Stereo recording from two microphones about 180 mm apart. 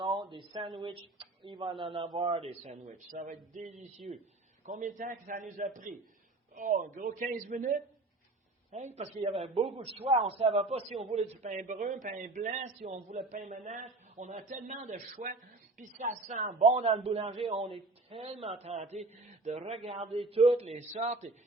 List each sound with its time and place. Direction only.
0.0 s a man's voice: 25° right (ahead or behind)